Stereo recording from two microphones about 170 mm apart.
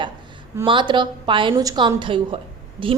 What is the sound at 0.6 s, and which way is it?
A woman's voice, 30° right (ahead or behind).